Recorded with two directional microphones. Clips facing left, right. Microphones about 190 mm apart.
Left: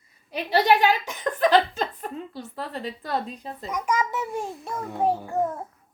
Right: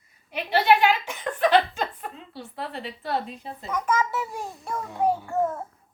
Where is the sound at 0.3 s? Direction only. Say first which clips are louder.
Even; 40° left (ahead or behind).